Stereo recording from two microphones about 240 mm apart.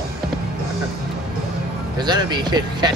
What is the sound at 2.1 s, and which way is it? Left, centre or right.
Speech, centre.